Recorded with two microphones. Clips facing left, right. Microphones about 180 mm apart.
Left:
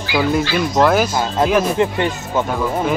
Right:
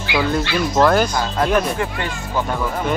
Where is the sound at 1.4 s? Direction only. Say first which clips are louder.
Left 4 dB; 20° left (ahead or behind).